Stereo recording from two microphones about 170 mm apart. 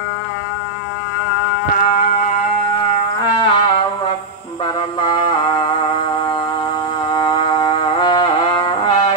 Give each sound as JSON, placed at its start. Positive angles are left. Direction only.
{"t": 1.8, "sound": "music", "side_deg": 50}
{"t": 3.2, "sound": "music", "side_deg": 25}
{"t": 5.0, "sound": "music", "side_deg": 25}
{"t": 7.2, "sound": "music", "side_deg": 25}